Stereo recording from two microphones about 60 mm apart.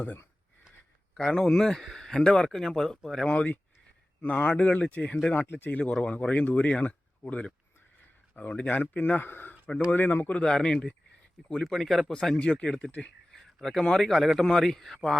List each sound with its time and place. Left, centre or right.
1.1 s speech: centre
3.2 s speech: left
5.3 s speech: left
5.8 s speech: centre; by 10.3 s left
10.3 s speech: centre
11.6 s a man's voice: centre
12.4 s speech: centre
13.4 s a sound: centre
13.8 s a man's voice: centre